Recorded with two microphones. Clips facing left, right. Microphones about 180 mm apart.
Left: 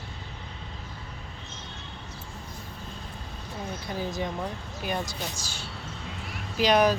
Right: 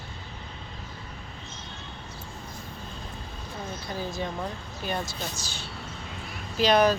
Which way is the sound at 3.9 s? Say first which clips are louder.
Left 1 dB; 15° left (ahead or behind).